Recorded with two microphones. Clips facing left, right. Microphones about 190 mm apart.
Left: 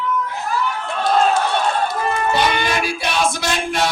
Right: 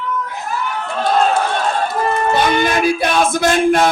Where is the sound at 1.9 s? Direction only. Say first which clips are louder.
Right 3 dB; 50° right (ahead or behind).